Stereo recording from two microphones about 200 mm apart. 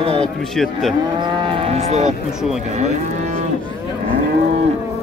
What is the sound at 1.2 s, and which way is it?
Cattle, 25° right (ahead or behind).